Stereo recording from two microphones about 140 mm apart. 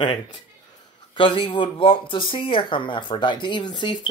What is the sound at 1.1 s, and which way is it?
Speech, 35° left (ahead or behind).